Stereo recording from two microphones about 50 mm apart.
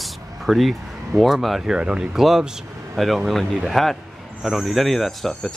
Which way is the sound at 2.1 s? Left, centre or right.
Centre.